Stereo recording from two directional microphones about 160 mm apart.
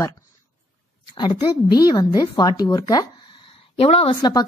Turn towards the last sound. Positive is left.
turn(degrees=25)  # may be behind; listen again after turning